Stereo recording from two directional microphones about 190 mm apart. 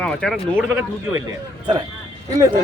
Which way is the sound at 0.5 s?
10° right (ahead or behind).